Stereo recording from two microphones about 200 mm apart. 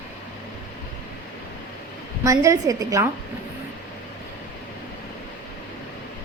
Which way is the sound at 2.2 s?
15° right (ahead or behind).